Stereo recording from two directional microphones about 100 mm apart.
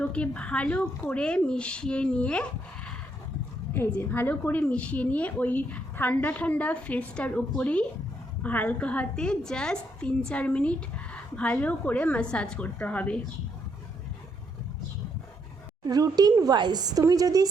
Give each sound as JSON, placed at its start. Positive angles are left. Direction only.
{"t": 0.0, "sound": "a woman's voice", "side_deg": 10}
{"t": 15.8, "sound": "a woman's voice", "side_deg": -40}